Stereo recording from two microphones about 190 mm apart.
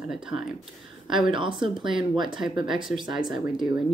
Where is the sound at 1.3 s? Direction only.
25° right (ahead or behind).